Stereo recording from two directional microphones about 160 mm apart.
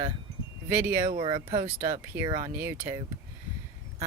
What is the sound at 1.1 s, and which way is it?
Speech, 30° right (ahead or behind).